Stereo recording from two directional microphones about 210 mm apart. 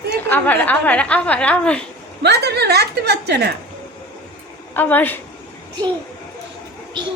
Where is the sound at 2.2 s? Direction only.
50° right (ahead or behind).